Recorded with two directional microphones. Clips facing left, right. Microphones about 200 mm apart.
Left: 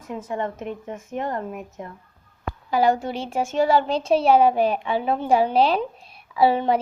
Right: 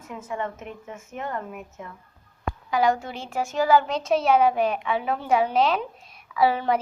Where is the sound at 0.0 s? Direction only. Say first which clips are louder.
Left 3 dB; 35° left (ahead or behind).